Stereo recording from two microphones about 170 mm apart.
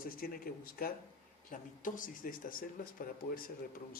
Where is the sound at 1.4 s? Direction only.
50° left (ahead or behind).